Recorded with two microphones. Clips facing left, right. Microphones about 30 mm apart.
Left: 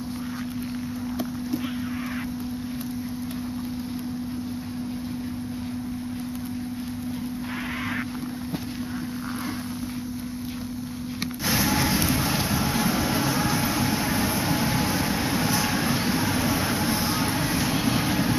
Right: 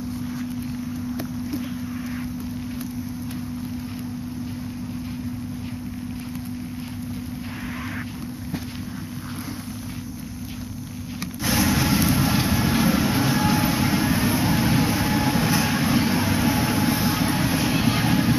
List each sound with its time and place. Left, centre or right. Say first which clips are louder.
11.4 s vehicle: right 2 dB; centre